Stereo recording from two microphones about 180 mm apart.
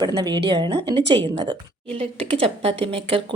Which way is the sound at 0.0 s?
25° right (ahead or behind).